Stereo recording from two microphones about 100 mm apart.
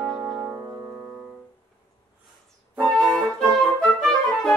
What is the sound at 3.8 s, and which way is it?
Music, 5° left (ahead or behind).